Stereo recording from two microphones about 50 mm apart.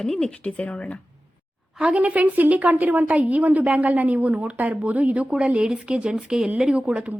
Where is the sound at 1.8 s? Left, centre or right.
Right.